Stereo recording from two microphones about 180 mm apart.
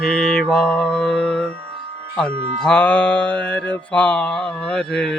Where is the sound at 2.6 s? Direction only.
5° left (ahead or behind).